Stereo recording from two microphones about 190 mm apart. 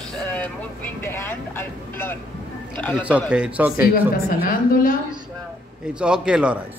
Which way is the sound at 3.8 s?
50° left (ahead or behind).